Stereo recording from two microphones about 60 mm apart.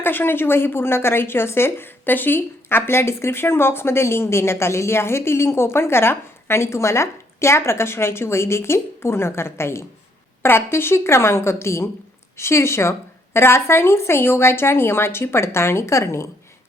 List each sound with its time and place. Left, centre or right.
0.0 s a woman's voice: left